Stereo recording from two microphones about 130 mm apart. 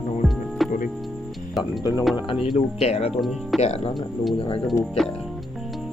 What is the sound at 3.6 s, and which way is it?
Speech, 50° left (ahead or behind).